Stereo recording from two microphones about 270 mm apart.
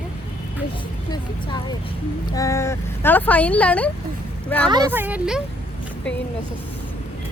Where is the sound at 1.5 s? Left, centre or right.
Centre.